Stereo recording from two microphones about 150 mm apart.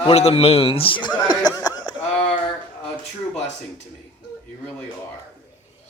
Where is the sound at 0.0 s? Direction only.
45° left (ahead or behind).